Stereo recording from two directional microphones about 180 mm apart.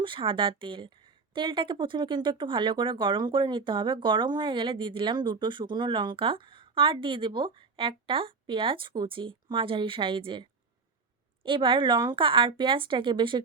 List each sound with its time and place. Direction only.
0.0 s a woman's voice: 30° right (ahead or behind)